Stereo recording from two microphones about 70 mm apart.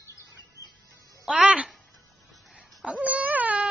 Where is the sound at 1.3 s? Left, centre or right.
Centre.